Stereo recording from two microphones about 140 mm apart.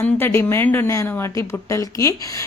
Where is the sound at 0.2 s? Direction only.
15° left (ahead or behind).